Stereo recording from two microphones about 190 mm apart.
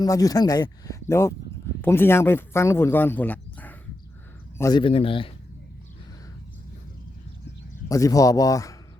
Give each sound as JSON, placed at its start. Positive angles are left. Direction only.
{"t": 0.0, "sound": "speech", "side_deg": 20}
{"t": 4.8, "sound": "speech", "side_deg": 30}
{"t": 7.9, "sound": "speech", "side_deg": 15}